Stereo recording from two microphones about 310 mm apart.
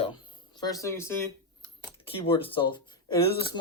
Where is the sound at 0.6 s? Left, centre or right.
Centre.